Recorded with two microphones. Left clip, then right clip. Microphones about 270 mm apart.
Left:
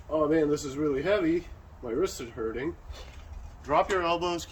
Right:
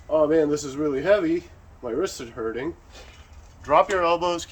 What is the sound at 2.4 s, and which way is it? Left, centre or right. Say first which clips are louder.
Speech: right 4 dB; right.